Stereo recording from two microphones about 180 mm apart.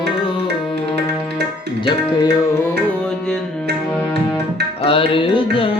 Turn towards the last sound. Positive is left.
turn(degrees=30)  # may be behind; listen again after turning